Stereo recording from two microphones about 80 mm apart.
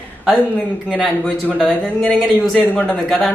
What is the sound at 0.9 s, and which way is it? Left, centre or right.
Speech, centre.